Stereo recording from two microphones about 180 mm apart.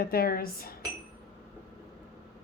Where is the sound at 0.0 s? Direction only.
55° left (ahead or behind).